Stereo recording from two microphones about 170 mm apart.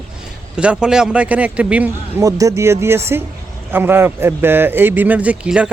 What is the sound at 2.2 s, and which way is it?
A man's voice, 20° right (ahead or behind).